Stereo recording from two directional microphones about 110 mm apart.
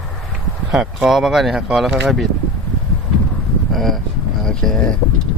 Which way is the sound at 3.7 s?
Centre (ahead or behind).